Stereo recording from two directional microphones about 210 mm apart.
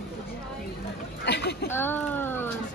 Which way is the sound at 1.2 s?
55° left (ahead or behind).